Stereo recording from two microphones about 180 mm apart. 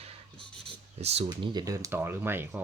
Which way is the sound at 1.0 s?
35° right (ahead or behind).